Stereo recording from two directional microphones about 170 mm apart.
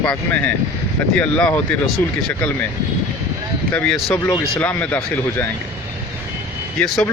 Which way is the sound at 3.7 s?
5° left (ahead or behind).